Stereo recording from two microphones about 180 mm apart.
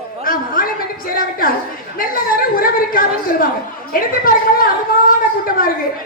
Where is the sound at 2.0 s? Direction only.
50° left (ahead or behind).